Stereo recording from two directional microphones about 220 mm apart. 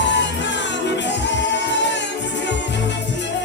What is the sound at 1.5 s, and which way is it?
Music, 55° left (ahead or behind).